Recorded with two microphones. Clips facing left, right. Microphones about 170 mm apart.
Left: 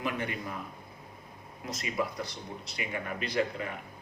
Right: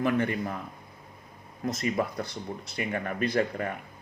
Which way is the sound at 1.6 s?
50° right (ahead or behind).